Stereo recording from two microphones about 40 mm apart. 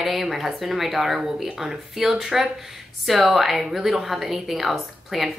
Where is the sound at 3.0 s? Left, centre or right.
Centre.